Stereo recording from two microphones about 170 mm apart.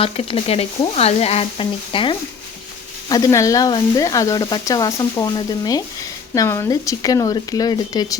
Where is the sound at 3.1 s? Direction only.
20° left (ahead or behind).